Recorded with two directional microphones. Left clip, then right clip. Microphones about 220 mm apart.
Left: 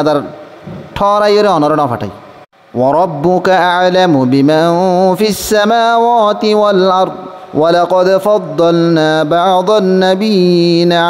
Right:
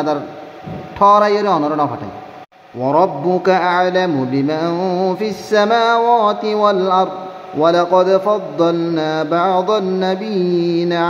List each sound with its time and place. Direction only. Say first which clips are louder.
0.9 s speech: left 2 dB; 40° left (ahead or behind)